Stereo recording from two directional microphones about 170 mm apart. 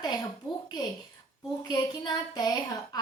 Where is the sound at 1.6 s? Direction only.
25° left (ahead or behind).